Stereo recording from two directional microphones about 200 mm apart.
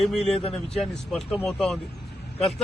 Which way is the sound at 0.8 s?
5° left (ahead or behind).